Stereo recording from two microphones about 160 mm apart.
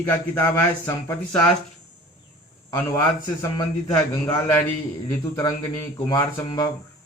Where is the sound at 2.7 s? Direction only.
20° left (ahead or behind).